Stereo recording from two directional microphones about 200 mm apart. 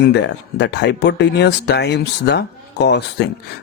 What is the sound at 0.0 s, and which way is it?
Speech, 55° left (ahead or behind).